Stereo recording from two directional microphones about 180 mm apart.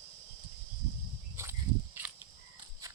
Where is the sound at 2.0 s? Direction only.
10° right (ahead or behind).